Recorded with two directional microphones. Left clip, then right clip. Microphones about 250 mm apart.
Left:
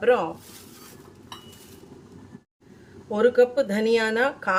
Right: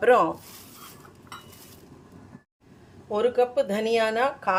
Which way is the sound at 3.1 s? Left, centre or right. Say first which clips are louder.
Left 3 dB; centre.